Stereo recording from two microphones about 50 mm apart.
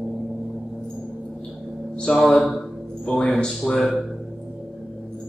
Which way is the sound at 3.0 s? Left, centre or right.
Centre.